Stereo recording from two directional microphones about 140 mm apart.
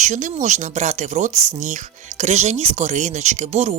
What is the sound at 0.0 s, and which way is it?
Speech, 60° right (ahead or behind).